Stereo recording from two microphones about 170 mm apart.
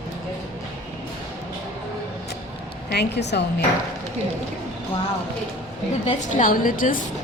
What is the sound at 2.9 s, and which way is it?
Speech, 75° left (ahead or behind).